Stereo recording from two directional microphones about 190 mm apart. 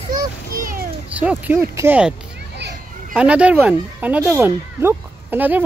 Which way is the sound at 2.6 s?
65° right (ahead or behind).